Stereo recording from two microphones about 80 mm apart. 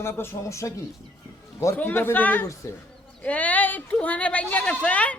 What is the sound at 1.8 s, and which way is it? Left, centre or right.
Speech, left.